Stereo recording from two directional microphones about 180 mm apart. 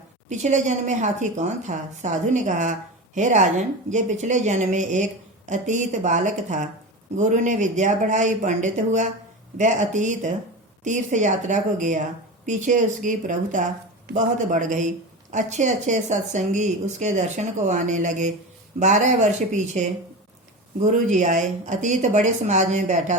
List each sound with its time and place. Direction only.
0.3 s a woman's voice: 40° right (ahead or behind)